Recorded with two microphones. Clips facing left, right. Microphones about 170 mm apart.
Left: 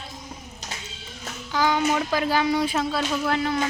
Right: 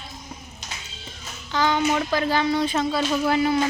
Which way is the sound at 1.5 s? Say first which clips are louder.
Right 1 dB; 10° left (ahead or behind).